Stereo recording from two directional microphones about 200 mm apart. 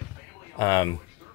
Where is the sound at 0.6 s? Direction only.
20° left (ahead or behind).